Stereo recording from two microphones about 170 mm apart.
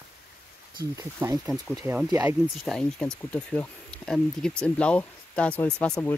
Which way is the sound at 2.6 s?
5° left (ahead or behind).